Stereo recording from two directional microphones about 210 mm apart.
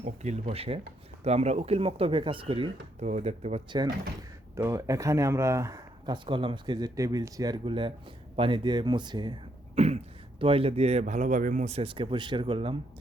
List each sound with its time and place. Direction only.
0.0 s a man's voice: 35° right (ahead or behind)
4.2 s a man's voice: 15° right (ahead or behind)